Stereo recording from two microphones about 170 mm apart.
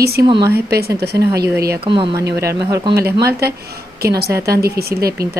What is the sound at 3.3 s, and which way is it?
A woman's voice, 65° right (ahead or behind).